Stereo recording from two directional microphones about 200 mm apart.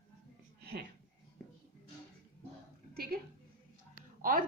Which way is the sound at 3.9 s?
45° right (ahead or behind).